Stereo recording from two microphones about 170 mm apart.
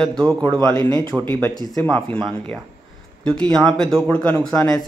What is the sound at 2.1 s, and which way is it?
Speech, 5° left (ahead or behind).